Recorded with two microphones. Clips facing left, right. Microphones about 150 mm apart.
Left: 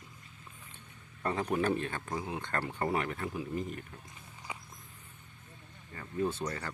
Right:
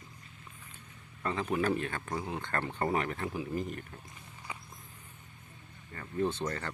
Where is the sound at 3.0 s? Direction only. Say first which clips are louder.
Right 1 dB; 35° right (ahead or behind).